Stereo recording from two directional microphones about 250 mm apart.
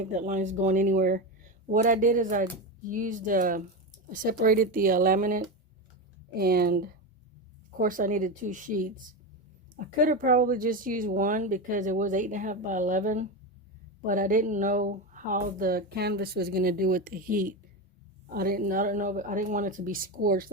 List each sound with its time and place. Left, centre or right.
0.0 s speech: right